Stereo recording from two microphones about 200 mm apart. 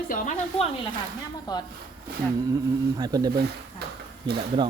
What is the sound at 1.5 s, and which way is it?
Speech, 20° left (ahead or behind).